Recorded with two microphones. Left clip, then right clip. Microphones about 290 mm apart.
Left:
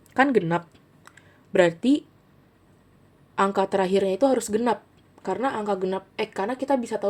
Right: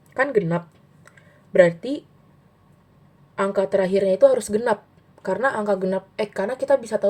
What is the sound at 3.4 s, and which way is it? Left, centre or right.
Speech, left.